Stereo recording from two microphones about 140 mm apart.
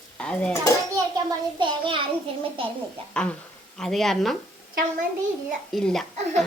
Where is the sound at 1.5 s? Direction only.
35° right (ahead or behind).